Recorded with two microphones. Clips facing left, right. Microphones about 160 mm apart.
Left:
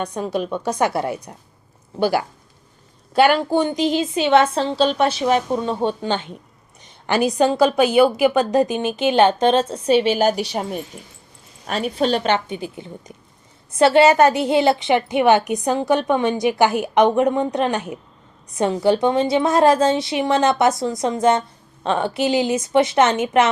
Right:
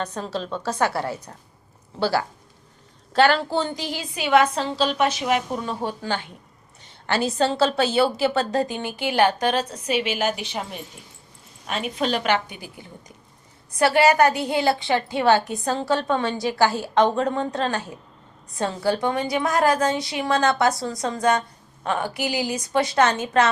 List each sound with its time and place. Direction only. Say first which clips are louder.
0.0 s a woman's voice: left 5 dB; 15° left (ahead or behind)